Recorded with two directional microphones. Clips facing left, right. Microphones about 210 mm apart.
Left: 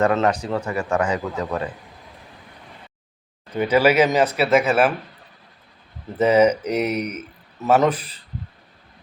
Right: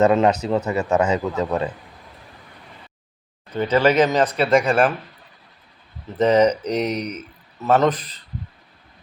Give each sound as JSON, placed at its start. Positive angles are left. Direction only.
{"t": 0.0, "sound": "speech", "side_deg": -20}
{"t": 3.5, "sound": "speech", "side_deg": 10}
{"t": 6.1, "sound": "speech", "side_deg": 10}